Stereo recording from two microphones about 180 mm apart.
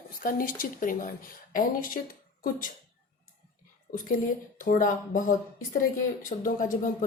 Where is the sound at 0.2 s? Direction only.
50° left (ahead or behind).